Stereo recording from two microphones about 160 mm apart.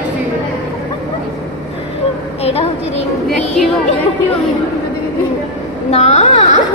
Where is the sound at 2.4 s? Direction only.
40° left (ahead or behind).